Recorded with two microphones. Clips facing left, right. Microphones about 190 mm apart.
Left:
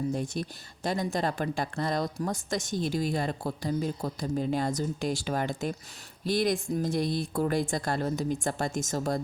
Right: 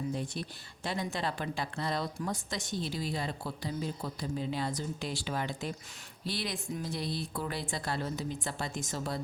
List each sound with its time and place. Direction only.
0.1 s speech: 45° left (ahead or behind)